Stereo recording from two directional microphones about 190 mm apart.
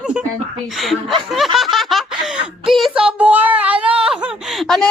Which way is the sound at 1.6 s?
Centre (ahead or behind).